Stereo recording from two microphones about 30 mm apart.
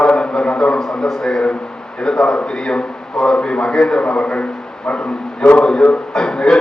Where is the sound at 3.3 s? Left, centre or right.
Left.